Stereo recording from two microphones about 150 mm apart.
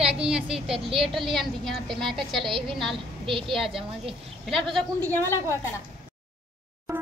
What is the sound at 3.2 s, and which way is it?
Speech, 35° right (ahead or behind).